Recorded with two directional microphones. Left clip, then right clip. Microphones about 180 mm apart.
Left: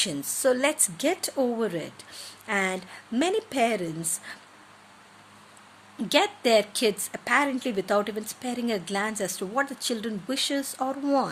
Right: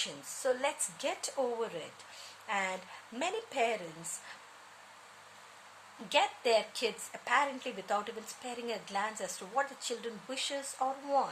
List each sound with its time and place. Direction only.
0.0 s a woman's voice: 45° left (ahead or behind)
6.1 s a woman's voice: 45° left (ahead or behind)